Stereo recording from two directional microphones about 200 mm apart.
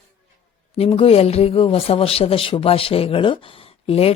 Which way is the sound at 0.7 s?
30° left (ahead or behind).